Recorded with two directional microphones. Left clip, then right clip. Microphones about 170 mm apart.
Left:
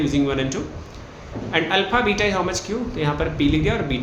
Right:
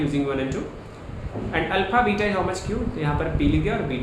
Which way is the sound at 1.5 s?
35° left (ahead or behind).